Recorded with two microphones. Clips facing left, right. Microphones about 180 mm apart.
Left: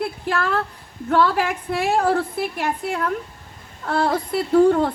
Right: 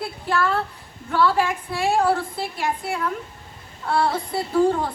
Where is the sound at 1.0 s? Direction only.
55° left (ahead or behind).